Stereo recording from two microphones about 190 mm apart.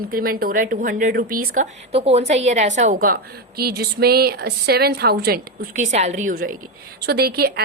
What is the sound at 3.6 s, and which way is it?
Speech, 55° right (ahead or behind).